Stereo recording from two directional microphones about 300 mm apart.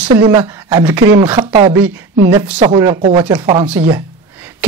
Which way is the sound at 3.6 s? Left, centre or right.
Centre.